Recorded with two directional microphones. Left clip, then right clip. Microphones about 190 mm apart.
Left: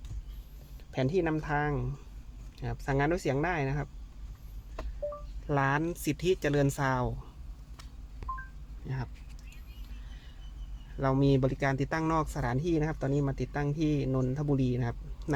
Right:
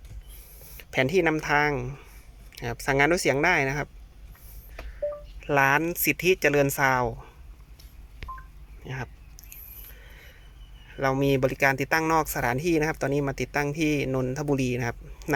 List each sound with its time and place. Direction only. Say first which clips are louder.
0.8 s speech: right 7 dB; 20° right (ahead or behind)
5.5 s speech: right 8 dB; 15° right (ahead or behind)
8.2 s a sound: left 1 dB; 5° right (ahead or behind)
10.9 s speech: right 4 dB; 15° right (ahead or behind)